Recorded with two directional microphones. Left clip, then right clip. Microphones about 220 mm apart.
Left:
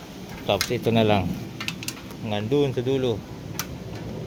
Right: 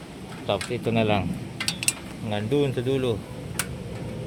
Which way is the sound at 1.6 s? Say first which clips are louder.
Right 5 dB; 45° right (ahead or behind).